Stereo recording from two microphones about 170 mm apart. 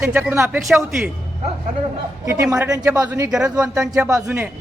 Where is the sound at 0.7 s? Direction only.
Centre (ahead or behind).